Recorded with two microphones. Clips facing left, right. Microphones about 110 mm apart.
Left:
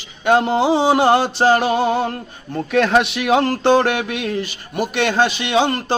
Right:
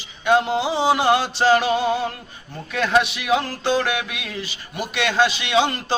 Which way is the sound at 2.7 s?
60° left (ahead or behind).